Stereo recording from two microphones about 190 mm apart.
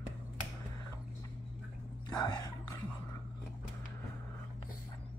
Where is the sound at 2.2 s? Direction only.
20° left (ahead or behind).